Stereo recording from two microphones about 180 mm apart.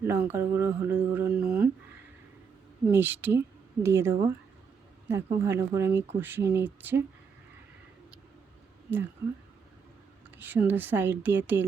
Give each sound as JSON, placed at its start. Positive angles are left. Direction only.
{"t": 0.1, "sound": "a woman's voice", "side_deg": -10}
{"t": 2.8, "sound": "a woman's voice", "side_deg": -10}
{"t": 10.3, "sound": "a woman's voice", "side_deg": -10}